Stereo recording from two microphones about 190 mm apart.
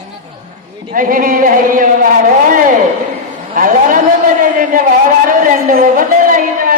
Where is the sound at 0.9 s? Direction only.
45° right (ahead or behind).